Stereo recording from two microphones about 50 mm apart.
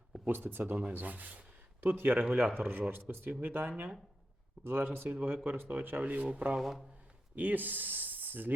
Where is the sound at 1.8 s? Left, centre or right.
Right.